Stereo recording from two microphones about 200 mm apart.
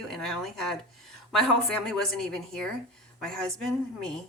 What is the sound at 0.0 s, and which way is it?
A woman's voice, centre (ahead or behind).